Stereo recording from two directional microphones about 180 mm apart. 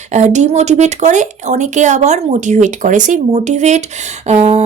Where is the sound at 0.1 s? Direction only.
40° right (ahead or behind).